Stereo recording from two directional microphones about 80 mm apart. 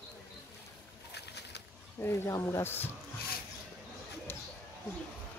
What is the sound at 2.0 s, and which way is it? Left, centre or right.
Speech, left.